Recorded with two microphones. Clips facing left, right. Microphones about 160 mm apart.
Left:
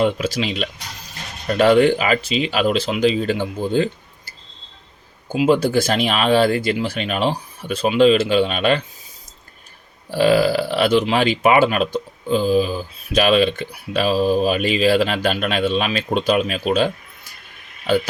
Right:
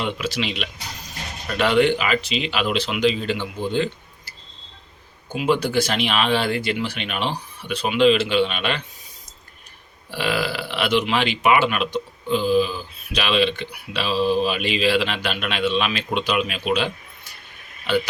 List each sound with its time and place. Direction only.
0.0 s speech: 45° left (ahead or behind)
5.5 s speech: 45° left (ahead or behind)
10.1 s speech: 40° left (ahead or behind)